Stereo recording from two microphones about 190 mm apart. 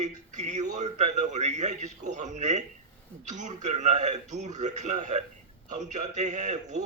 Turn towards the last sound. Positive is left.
turn(degrees=-40)  # may be behind; listen again after turning